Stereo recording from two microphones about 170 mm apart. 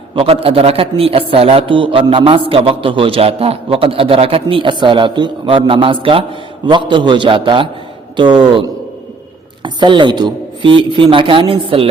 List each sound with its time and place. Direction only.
0.2 s a man's voice: 35° right (ahead or behind)